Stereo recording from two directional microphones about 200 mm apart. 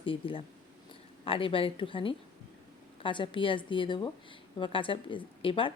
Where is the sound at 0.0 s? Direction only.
25° left (ahead or behind).